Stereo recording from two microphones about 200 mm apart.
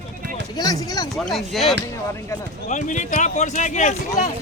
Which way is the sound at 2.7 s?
35° left (ahead or behind).